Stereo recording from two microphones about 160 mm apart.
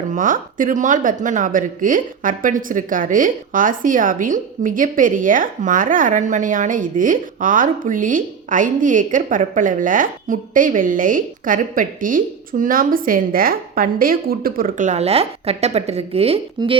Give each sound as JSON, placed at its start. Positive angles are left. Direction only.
{"t": 0.1, "sound": "speech", "side_deg": -55}